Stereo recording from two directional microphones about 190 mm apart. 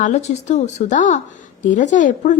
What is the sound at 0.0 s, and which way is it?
A woman's voice, 40° left (ahead or behind).